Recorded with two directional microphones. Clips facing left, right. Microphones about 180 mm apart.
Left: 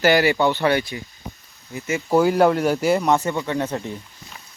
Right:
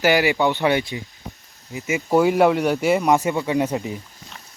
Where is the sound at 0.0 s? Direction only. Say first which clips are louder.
Left 1 dB; 15° right (ahead or behind).